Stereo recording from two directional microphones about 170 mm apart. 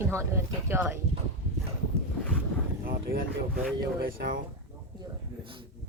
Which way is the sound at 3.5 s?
60° right (ahead or behind).